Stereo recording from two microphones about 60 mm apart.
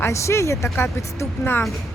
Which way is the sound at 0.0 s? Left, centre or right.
Left.